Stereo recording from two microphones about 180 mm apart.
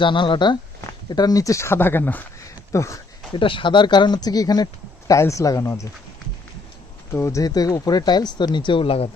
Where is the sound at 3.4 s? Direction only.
30° left (ahead or behind).